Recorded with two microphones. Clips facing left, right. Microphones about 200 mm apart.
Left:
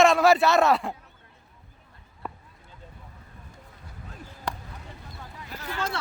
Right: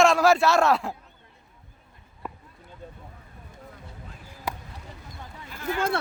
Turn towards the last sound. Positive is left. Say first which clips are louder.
# right 5 dB
turn(degrees=-50)  # may be behind; listen again after turning